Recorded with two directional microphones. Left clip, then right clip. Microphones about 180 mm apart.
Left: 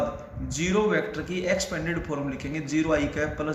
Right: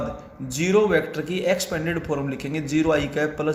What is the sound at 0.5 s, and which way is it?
Speech, 50° right (ahead or behind).